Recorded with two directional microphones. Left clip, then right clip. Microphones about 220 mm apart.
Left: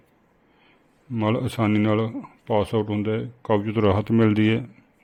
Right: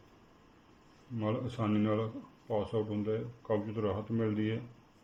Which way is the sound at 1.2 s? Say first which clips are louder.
Left 12 dB; 50° left (ahead or behind).